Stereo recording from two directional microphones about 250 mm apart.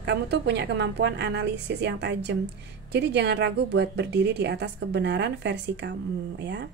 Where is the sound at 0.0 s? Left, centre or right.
Right.